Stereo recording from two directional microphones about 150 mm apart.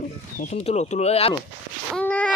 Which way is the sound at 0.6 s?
45° left (ahead or behind).